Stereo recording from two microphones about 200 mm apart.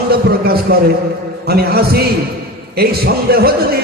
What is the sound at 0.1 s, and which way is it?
Speech, 50° right (ahead or behind).